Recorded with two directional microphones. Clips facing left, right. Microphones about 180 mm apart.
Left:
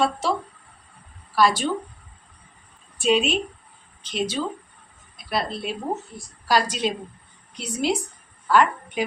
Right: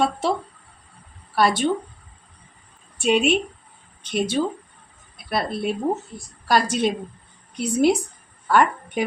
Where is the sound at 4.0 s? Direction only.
55° right (ahead or behind).